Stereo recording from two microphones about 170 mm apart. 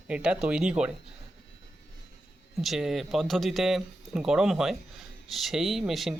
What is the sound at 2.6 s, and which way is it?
Speech, centre (ahead or behind).